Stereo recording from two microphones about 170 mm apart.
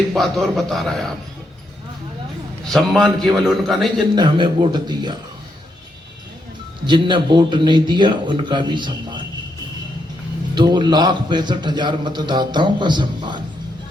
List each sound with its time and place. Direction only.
0.1 s a man's voice: centre (ahead or behind)
2.6 s a man's voice: centre (ahead or behind)
4.1 s a man's voice: 25° right (ahead or behind)
6.8 s a man's voice: 30° right (ahead or behind)
10.5 s a man's voice: 25° right (ahead or behind)